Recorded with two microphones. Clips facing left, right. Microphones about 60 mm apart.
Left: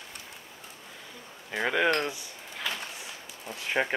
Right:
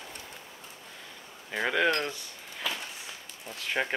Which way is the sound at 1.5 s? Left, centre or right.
Centre.